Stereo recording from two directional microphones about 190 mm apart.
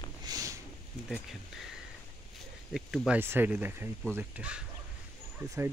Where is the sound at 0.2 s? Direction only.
20° right (ahead or behind).